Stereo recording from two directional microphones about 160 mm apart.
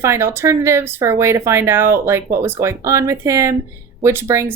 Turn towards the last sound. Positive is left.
turn(degrees=-15)  # may be behind; listen again after turning